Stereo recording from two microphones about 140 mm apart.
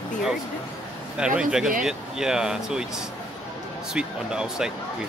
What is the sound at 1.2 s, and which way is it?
Speech, 5° right (ahead or behind).